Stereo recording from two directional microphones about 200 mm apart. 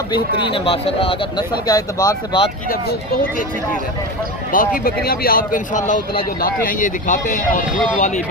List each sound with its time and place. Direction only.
0.1 s speech: 25° left (ahead or behind)
4.5 s speech: 45° left (ahead or behind)